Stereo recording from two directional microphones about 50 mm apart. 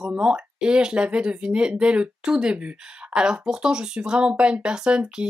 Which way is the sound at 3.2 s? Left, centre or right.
Centre.